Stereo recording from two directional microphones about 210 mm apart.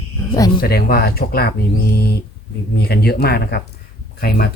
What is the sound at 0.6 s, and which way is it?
Speech, 45° left (ahead or behind).